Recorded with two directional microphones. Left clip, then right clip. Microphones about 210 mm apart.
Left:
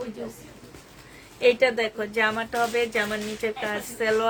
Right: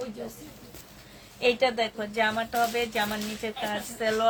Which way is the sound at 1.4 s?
35° left (ahead or behind).